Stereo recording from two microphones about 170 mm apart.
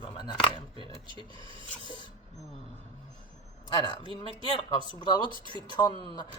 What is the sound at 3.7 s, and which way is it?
Speech, 30° left (ahead or behind).